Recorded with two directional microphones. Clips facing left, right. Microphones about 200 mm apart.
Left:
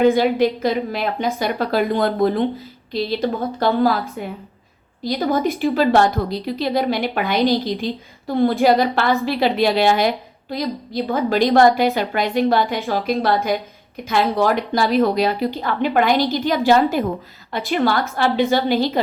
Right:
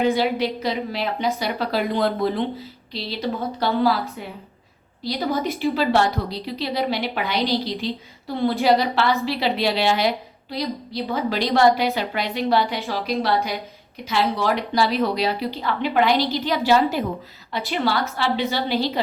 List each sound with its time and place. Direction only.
0.0 s a woman's voice: 50° left (ahead or behind)